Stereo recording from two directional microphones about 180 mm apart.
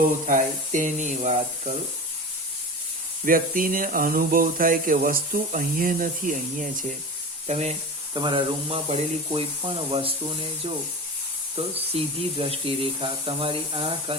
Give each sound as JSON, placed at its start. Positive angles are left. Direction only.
{"t": 0.3, "sound": "speech", "side_deg": -45}
{"t": 3.2, "sound": "speech", "side_deg": -50}
{"t": 8.1, "sound": "speech", "side_deg": -25}
{"t": 11.9, "sound": "speech", "side_deg": -30}